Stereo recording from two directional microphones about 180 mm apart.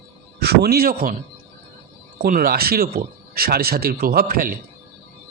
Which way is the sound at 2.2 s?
50° right (ahead or behind).